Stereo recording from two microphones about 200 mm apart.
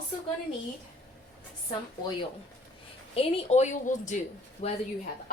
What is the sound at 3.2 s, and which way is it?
A woman's voice, 30° left (ahead or behind).